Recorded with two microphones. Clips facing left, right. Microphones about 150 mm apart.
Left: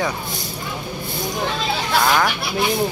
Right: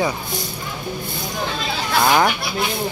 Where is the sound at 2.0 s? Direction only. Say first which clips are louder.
Right 3 dB; 15° right (ahead or behind).